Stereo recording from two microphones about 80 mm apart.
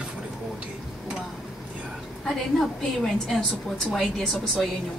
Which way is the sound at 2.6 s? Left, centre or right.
Centre.